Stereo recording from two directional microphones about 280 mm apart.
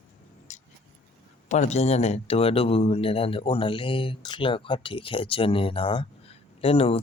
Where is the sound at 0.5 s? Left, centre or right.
Left.